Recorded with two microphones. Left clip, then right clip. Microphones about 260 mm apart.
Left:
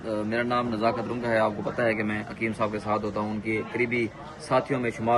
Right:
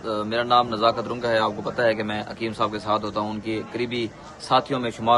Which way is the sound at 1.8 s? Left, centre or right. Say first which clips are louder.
Right 5 dB; centre.